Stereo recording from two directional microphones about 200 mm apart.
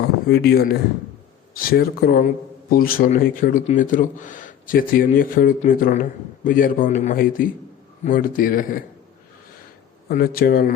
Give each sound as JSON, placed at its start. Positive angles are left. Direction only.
{"t": 0.3, "sound": "a man's voice", "side_deg": 55}
{"t": 10.1, "sound": "a man's voice", "side_deg": 45}